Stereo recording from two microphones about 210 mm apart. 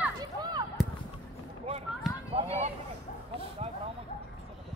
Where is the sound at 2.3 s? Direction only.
30° right (ahead or behind).